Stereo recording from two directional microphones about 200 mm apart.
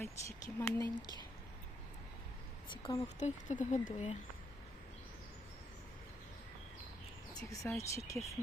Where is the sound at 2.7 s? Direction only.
20° left (ahead or behind).